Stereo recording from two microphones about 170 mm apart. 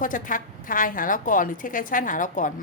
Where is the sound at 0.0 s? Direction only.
50° left (ahead or behind).